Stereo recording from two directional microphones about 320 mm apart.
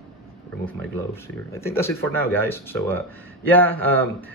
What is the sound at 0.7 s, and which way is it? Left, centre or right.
A man's voice, centre.